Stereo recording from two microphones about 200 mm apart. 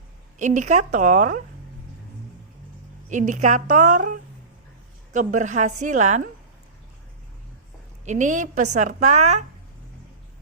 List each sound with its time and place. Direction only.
0.3 s a woman's voice: 40° right (ahead or behind)
3.1 s a woman's voice: 40° right (ahead or behind)
8.0 s a woman's voice: 35° right (ahead or behind)